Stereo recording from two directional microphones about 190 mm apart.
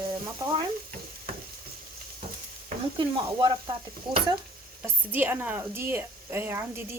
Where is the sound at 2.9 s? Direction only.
25° right (ahead or behind).